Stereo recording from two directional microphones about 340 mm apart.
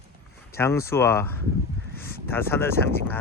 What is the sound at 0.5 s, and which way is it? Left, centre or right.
Speech, centre.